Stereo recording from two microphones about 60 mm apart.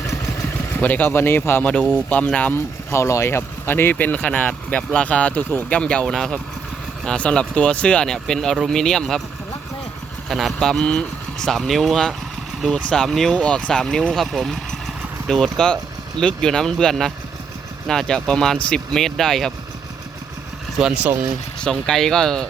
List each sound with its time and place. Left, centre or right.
0.8 s a man's voice: left
2.0 s speech: centre
2.9 s speech: left
5.6 s speech: centre
6.1 s speech: centre
7.2 s speech: centre
10.2 s speech: centre
13.4 s speech: centre
20.7 s speech: centre
21.6 s speech: centre